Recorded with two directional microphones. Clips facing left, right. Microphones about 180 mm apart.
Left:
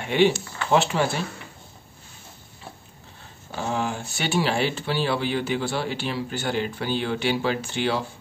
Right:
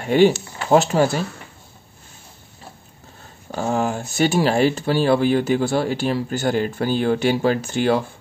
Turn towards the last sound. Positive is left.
turn(degrees=-45)  # may be behind; listen again after turning